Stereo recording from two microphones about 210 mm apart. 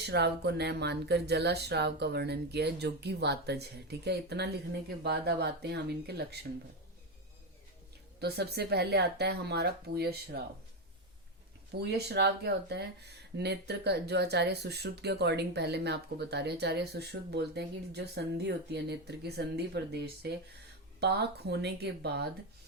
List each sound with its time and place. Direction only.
0.1 s speech: 50° right (ahead or behind)
8.2 s speech: 50° right (ahead or behind)
11.8 s speech: 50° right (ahead or behind)